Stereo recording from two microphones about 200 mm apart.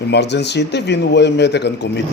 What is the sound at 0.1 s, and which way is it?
Speech, 60° left (ahead or behind).